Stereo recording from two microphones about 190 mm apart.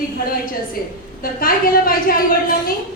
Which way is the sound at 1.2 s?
50° left (ahead or behind).